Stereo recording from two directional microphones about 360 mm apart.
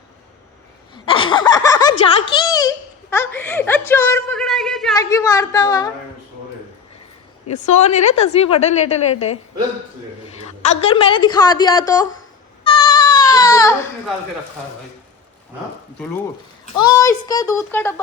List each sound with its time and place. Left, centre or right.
1.0 s a child's voice: centre
7.4 s a woman's voice: centre
12.6 s cat: centre
16.6 s a woman's voice: centre